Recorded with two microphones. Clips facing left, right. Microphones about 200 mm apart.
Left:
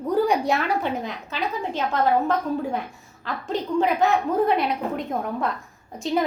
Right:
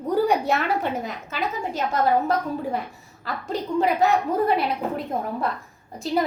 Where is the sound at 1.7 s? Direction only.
40° right (ahead or behind).